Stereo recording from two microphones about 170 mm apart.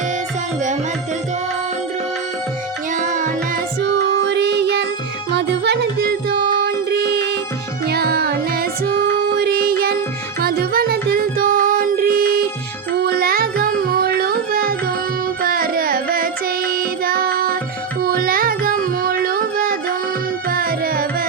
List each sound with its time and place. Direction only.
2.9 s music: 50° right (ahead or behind)
3.8 s music: 85° right
5.3 s music: 90° right; by 14.8 s 60° right (ahead or behind)
15.4 s carnatic music: 60° right (ahead or behind)
18.0 s music: 60° right (ahead or behind)
20.5 s tabla: 60° right (ahead or behind)